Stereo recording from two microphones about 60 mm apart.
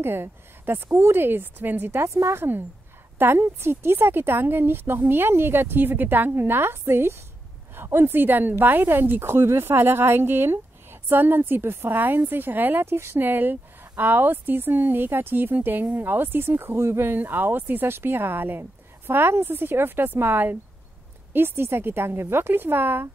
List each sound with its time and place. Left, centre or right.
0.0 s speech: right
3.2 s speech: right